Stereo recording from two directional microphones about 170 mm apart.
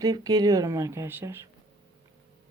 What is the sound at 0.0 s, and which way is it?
Speech, 20° right (ahead or behind).